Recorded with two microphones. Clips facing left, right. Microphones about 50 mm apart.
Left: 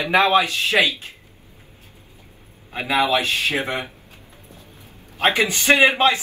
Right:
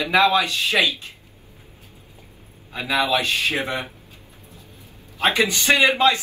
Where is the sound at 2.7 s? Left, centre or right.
Left.